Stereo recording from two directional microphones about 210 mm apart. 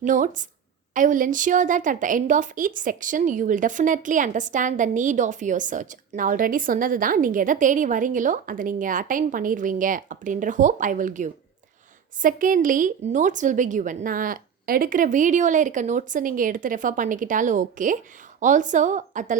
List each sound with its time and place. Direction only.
0.0 s a woman's voice: 35° right (ahead or behind)